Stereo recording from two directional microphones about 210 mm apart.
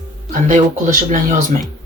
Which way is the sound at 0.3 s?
40° right (ahead or behind).